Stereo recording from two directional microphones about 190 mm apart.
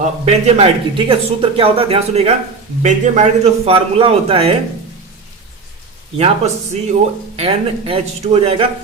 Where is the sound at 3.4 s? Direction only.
30° right (ahead or behind).